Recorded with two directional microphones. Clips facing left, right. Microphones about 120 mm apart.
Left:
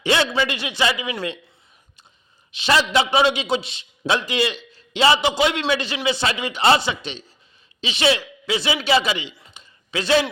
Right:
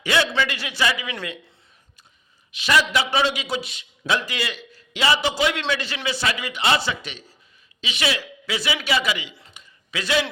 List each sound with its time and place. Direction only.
0.0 s a man's voice: 25° left (ahead or behind)
2.5 s a man's voice: 30° left (ahead or behind)
6.7 s a man's voice: 20° left (ahead or behind)
9.6 s a sound: 30° left (ahead or behind)